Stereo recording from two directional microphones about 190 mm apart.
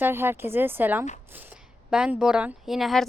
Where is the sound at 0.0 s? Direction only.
10° right (ahead or behind).